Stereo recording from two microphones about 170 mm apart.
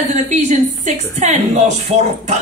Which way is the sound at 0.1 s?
40° right (ahead or behind).